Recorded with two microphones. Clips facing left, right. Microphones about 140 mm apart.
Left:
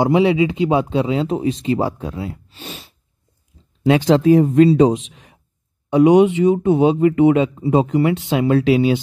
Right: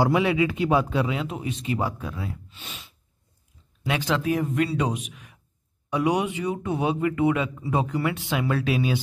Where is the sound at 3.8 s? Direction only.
30° left (ahead or behind).